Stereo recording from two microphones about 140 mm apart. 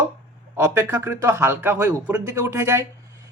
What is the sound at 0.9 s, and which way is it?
Speech, 15° right (ahead or behind).